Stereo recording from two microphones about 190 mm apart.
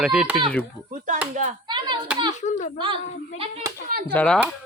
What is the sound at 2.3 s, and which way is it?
Speech, 40° left (ahead or behind).